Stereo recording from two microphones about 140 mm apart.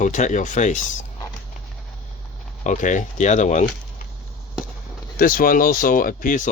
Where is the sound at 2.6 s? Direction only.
60° left (ahead or behind).